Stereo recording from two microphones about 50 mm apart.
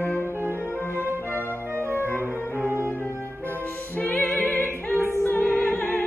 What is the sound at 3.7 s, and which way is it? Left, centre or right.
Music, left.